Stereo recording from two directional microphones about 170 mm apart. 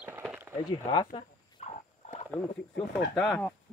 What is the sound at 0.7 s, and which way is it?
Speech, 25° left (ahead or behind).